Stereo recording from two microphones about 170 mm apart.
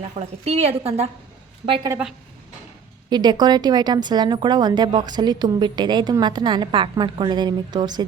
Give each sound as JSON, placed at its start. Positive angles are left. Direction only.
{"t": 0.4, "sound": "a woman's voice", "side_deg": -40}
{"t": 1.9, "sound": "a woman's voice", "side_deg": -5}
{"t": 3.1, "sound": "a woman's voice", "side_deg": -25}